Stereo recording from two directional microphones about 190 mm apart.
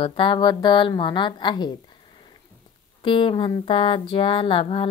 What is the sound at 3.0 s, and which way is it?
Speech, 25° left (ahead or behind).